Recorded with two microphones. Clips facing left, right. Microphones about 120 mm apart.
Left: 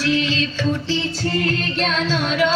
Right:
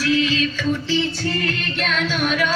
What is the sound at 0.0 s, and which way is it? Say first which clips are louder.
Music: right 1 dB; 25° left (ahead or behind).